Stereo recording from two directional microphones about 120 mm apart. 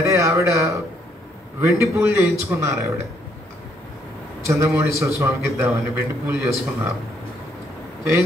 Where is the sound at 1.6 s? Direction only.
25° right (ahead or behind).